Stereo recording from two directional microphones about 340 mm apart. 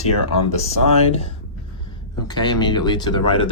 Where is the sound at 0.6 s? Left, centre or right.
Centre.